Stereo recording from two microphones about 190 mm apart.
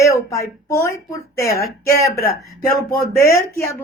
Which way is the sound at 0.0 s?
15° left (ahead or behind).